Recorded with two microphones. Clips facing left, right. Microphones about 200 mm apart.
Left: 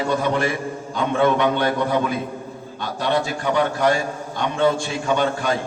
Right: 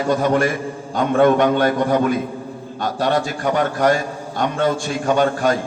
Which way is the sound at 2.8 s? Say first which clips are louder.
Right 3 dB; 45° right (ahead or behind).